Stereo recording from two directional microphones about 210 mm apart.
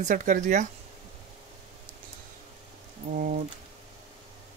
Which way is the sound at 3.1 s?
40° right (ahead or behind).